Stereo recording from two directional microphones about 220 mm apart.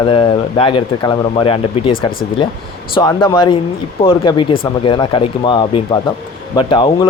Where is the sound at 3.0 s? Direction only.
20° left (ahead or behind).